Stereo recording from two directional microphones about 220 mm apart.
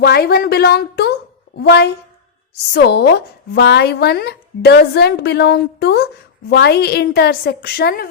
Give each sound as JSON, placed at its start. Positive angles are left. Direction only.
{"t": 0.0, "sound": "speech", "side_deg": 45}